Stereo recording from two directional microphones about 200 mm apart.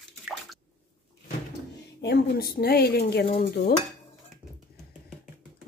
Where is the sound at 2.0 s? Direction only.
50° left (ahead or behind).